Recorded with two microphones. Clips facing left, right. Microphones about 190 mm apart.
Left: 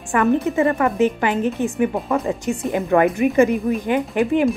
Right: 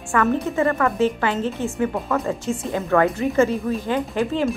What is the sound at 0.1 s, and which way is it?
Speech, 20° left (ahead or behind).